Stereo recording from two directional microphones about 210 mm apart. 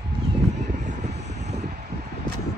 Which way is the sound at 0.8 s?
35° right (ahead or behind).